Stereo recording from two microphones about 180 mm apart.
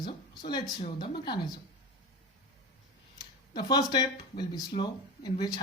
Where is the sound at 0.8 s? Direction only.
30° left (ahead or behind).